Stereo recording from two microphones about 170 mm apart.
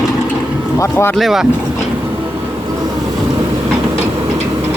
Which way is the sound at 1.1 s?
Centre (ahead or behind).